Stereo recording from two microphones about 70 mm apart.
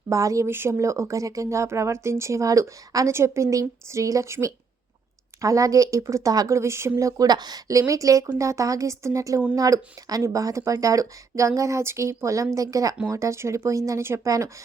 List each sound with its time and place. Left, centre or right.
0.1 s speech: right
0.4 s speech: right
3.1 s speech: right
6.5 s speech: right
7.3 s speech: right
7.7 s speech: right